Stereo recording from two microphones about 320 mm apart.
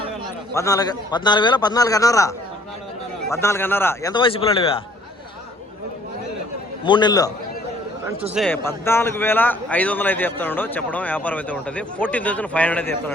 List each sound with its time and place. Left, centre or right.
0.5 s a man's voice: centre
6.8 s a man's voice: centre